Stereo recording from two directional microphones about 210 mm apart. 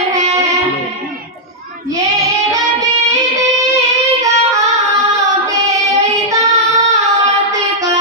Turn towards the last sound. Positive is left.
turn(degrees=-15)  # may be behind; listen again after turning